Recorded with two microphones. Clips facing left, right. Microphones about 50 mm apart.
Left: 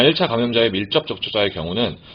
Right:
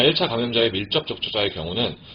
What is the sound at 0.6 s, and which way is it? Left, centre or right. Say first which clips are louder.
Speech: left 4 dB; left.